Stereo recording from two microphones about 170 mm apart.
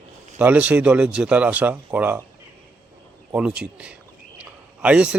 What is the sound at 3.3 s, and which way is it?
Speech, 5° right (ahead or behind).